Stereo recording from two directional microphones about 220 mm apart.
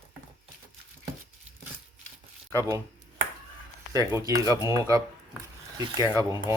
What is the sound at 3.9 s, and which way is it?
Speech, 15° right (ahead or behind).